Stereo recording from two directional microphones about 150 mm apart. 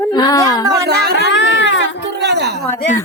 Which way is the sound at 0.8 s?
90° right.